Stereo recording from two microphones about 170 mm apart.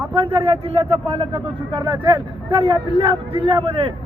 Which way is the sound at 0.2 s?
35° right (ahead or behind).